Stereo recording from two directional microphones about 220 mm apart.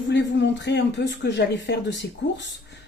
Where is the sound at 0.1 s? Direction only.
55° left (ahead or behind).